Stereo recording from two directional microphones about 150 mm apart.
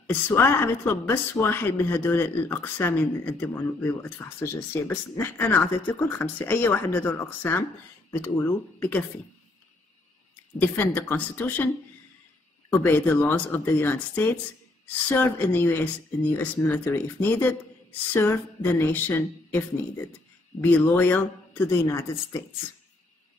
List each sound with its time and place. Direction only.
0.0 s a woman's voice: 15° left (ahead or behind)
10.6 s a woman's voice: 15° left (ahead or behind)